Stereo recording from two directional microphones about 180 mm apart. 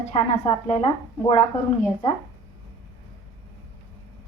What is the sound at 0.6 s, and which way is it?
Speech, 35° left (ahead or behind).